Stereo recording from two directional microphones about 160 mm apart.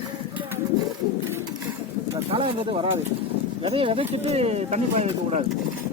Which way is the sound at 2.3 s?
30° right (ahead or behind).